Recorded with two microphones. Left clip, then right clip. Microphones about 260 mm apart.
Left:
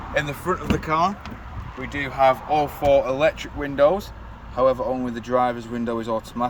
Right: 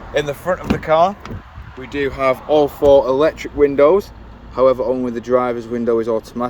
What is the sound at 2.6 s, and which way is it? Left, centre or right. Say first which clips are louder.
Speech: right 7 dB; centre.